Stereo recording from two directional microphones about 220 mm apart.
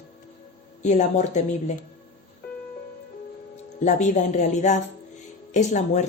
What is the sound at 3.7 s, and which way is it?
Speech, 35° left (ahead or behind).